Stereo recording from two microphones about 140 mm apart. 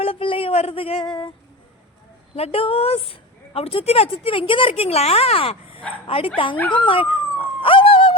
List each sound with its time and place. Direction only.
0.0 s a sound: 40° left (ahead or behind)
2.3 s a woman's voice: 45° left (ahead or behind)
7.6 s dog: 40° left (ahead or behind)